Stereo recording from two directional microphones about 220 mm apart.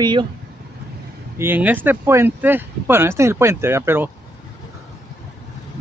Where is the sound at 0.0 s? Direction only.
20° right (ahead or behind).